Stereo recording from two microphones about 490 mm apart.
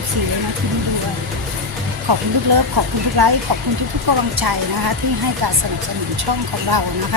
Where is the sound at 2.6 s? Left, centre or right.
Right.